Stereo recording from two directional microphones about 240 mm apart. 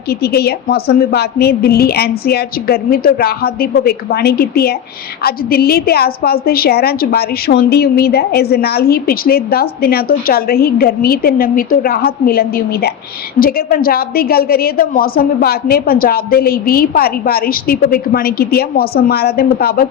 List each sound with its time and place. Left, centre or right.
0.1 s a woman's voice: left